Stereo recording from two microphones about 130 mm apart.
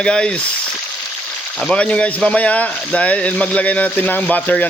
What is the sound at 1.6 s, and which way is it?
Speech, 10° left (ahead or behind).